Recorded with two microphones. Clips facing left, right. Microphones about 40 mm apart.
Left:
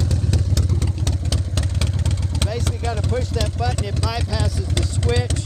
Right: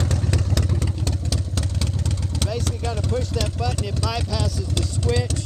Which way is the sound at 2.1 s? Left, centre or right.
Left.